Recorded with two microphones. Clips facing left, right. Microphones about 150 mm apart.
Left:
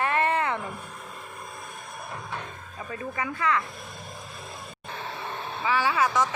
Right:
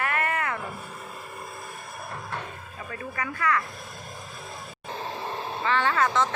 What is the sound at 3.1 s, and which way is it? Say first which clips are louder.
Speech: even; 15° left (ahead or behind).